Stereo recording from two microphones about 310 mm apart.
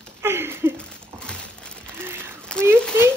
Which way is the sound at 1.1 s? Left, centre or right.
Centre.